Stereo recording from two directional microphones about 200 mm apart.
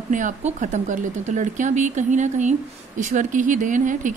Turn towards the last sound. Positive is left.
turn(degrees=-40)  # may be behind; listen again after turning